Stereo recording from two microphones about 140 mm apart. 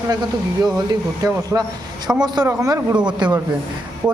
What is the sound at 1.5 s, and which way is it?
Speech, 15° right (ahead or behind).